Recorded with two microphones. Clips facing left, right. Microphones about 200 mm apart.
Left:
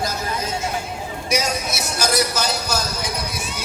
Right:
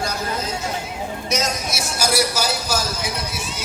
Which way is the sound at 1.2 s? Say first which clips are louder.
Left 1 dB; 10° left (ahead or behind).